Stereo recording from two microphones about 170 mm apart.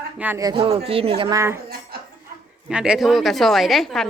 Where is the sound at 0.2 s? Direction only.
10° right (ahead or behind).